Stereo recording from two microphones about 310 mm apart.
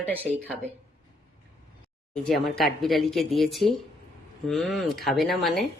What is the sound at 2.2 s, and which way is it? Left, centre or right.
Speech, centre.